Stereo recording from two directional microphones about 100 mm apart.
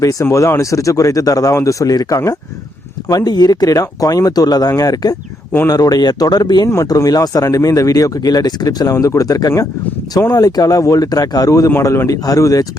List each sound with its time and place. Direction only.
0.0 s speech: 35° left (ahead or behind)